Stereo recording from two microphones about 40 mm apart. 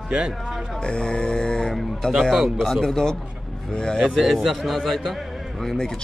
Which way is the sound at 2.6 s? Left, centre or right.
Centre.